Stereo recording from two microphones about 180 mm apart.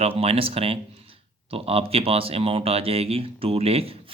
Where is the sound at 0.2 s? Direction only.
30° right (ahead or behind).